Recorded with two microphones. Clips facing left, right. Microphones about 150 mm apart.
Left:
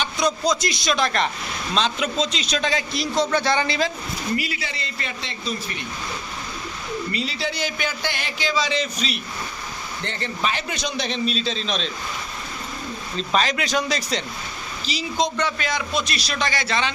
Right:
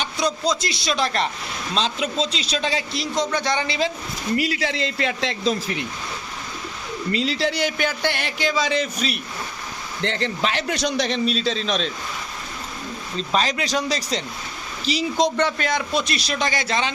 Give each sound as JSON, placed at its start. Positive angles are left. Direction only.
{"t": 0.0, "sound": "a man's voice", "side_deg": -30}
{"t": 4.4, "sound": "speech", "side_deg": -75}
{"t": 7.1, "sound": "speech", "side_deg": -90}
{"t": 10.0, "sound": "a man's voice", "side_deg": -90}
{"t": 13.3, "sound": "speech", "side_deg": -35}
{"t": 14.9, "sound": "speech", "side_deg": -60}
{"t": 16.4, "sound": "a man's voice", "side_deg": -15}